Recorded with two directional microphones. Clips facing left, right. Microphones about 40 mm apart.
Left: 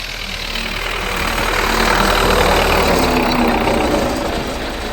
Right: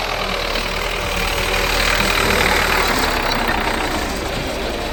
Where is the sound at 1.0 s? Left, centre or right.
Left.